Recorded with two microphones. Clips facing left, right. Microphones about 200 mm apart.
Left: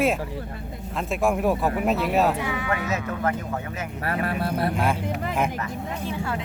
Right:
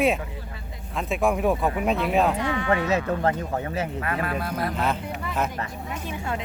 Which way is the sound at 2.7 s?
30° right (ahead or behind).